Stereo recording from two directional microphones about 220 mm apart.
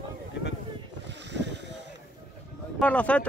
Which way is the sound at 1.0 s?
50° right (ahead or behind).